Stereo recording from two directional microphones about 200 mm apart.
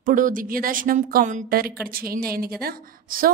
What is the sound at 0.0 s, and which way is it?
A woman's voice, 40° right (ahead or behind).